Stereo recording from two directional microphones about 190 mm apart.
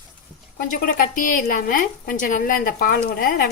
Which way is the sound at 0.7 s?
45° left (ahead or behind).